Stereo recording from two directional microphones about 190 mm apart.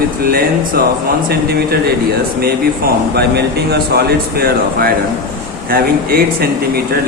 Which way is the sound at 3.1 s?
55° right (ahead or behind).